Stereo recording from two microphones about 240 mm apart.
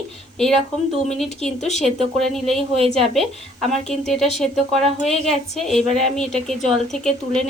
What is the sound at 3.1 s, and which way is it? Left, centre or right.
A woman's voice, centre.